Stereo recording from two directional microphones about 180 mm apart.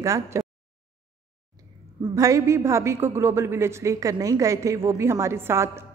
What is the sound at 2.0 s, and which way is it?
A woman's voice, 20° right (ahead or behind).